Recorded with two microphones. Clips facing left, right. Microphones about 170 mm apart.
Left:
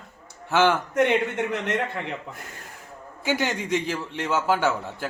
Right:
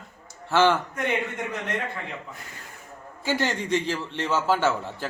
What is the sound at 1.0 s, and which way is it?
Speech, 75° left (ahead or behind).